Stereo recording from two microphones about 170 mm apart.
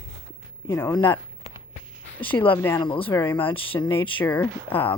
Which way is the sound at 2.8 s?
30° left (ahead or behind).